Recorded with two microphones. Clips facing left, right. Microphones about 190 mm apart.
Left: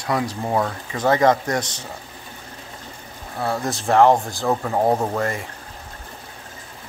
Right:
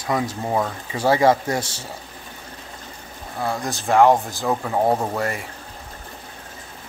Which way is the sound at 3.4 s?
Centre (ahead or behind).